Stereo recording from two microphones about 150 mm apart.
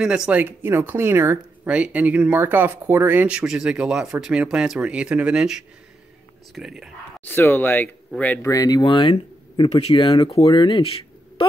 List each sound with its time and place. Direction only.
0.0 s speech: 5° right (ahead or behind)
7.2 s speech: 15° left (ahead or behind)
8.4 s speech: 20° left (ahead or behind)